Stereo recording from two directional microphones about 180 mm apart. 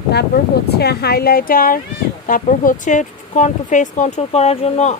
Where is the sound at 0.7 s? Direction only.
65° left (ahead or behind).